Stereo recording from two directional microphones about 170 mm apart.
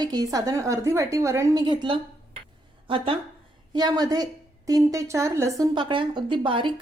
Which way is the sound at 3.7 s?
25° right (ahead or behind).